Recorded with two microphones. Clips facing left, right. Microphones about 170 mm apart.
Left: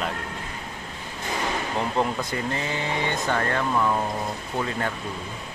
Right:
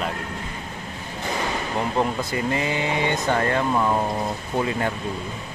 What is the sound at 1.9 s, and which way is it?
Speech, 10° right (ahead or behind).